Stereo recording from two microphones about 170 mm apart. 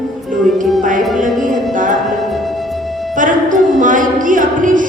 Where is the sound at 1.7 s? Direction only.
50° right (ahead or behind).